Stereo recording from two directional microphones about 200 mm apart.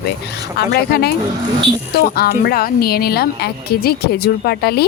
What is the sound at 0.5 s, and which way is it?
A woman's voice, 50° left (ahead or behind).